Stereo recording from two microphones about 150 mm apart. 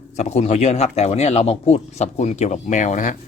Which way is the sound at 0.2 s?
50° left (ahead or behind).